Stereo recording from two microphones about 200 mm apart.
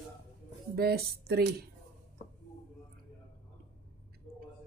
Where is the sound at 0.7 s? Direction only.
50° right (ahead or behind).